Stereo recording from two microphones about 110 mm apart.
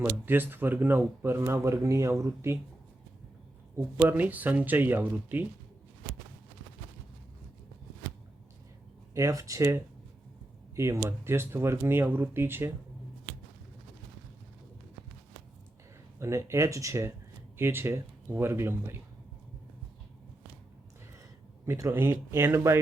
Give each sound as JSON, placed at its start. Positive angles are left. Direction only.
{"t": 0.3, "sound": "speech", "side_deg": -20}
{"t": 3.8, "sound": "speech", "side_deg": -15}
{"t": 9.1, "sound": "speech", "side_deg": -30}
{"t": 16.1, "sound": "speech", "side_deg": -25}
{"t": 21.7, "sound": "speech", "side_deg": -25}